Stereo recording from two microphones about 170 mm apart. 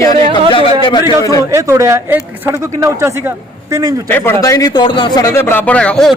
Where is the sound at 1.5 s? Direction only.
15° right (ahead or behind).